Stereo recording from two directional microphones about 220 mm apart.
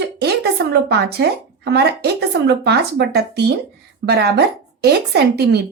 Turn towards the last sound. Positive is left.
turn(degrees=-50)  # may be behind; listen again after turning